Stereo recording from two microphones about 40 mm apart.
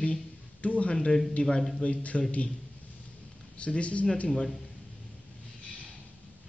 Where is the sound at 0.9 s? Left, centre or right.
Centre.